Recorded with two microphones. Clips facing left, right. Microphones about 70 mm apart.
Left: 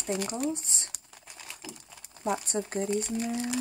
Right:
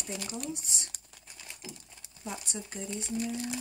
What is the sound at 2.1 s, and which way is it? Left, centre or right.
Speech, left.